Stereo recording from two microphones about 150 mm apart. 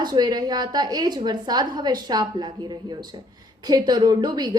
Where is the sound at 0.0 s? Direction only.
25° right (ahead or behind).